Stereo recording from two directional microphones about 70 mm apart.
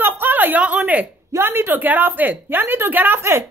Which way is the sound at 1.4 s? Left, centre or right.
Right.